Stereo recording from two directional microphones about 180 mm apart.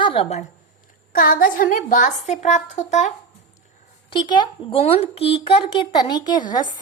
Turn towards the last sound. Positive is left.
turn(degrees=25)  # may be behind; listen again after turning